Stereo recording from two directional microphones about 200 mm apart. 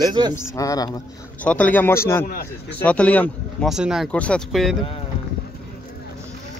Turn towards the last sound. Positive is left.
turn(degrees=0)  # may be behind; listen again after turning